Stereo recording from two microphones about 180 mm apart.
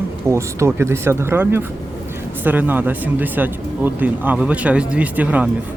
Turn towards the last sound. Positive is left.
turn(degrees=-10)  # may be behind; listen again after turning